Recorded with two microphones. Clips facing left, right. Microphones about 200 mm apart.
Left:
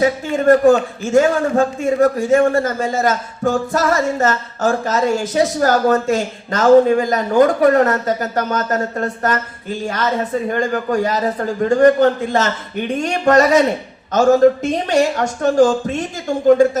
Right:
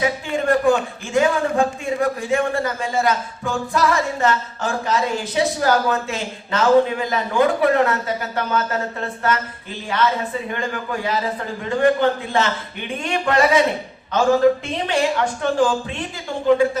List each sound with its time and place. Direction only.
0.0 s a man's voice: 40° left (ahead or behind)